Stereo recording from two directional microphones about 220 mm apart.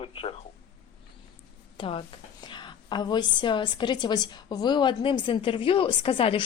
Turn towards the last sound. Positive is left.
turn(degrees=25)  # may be behind; listen again after turning